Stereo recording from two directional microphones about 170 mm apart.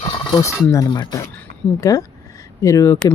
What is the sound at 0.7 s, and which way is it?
Speech, 20° left (ahead or behind).